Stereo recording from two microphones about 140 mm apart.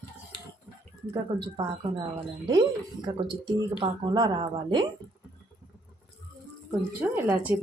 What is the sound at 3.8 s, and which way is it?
Speech, 30° right (ahead or behind).